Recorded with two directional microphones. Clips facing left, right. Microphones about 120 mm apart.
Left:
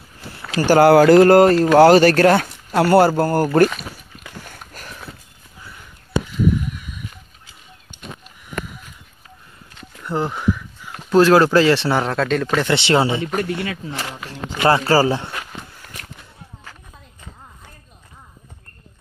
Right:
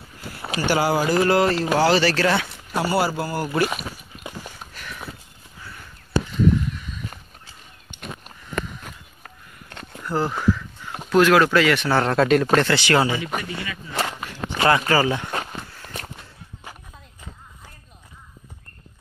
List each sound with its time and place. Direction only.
0.6 s speech: 45° left (ahead or behind)
0.8 s speech: 70° left (ahead or behind)
1.3 s speech: 50° left (ahead or behind)
4.5 s a sound: 45° left (ahead or behind)
6.4 s a sound: 10° left (ahead or behind)
8.8 s a sound: 60° right (ahead or behind)
10.0 s speech: 20° left (ahead or behind)
11.1 s speech: 35° left (ahead or behind)
11.9 s speech: 5° left (ahead or behind)
12.2 s speech: 5° right (ahead or behind)
12.6 s speech: 25° left (ahead or behind)
13.4 s speech: 65° left (ahead or behind)
14.7 s speech: 35° left (ahead or behind)